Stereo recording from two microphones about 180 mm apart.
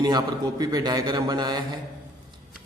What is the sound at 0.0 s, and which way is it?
A man's voice, 20° right (ahead or behind).